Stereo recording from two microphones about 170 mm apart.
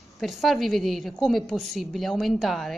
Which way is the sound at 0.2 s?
Centre (ahead or behind).